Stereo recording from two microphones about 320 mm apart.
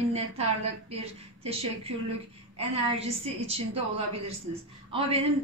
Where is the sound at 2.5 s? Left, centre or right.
Centre.